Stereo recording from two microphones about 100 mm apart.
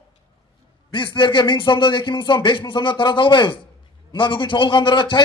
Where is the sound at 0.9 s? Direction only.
55° left (ahead or behind).